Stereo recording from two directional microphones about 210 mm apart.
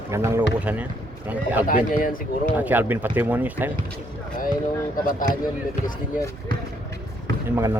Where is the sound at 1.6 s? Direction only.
40° left (ahead or behind).